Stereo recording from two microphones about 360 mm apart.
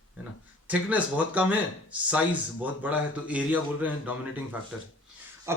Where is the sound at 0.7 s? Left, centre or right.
Centre.